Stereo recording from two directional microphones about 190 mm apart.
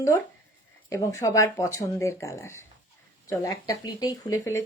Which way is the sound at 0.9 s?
15° left (ahead or behind).